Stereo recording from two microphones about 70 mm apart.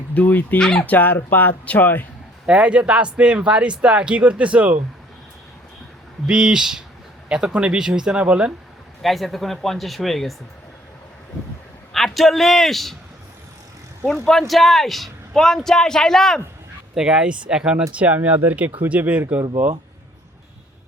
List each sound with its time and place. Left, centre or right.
0.1 s speech: left
0.6 s speech: centre
0.9 s speech: left
2.5 s speech: centre
6.2 s speech: centre
9.0 s a man's voice: centre
11.9 s a man's voice: centre
14.3 s a man's voice: centre
16.9 s speech: centre
19.2 s speech: right